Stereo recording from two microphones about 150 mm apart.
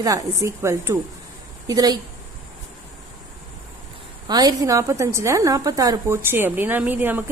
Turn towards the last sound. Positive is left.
turn(degrees=-10)  # may be behind; listen again after turning